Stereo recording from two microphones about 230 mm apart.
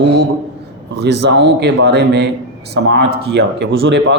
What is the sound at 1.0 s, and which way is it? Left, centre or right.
Speech, right.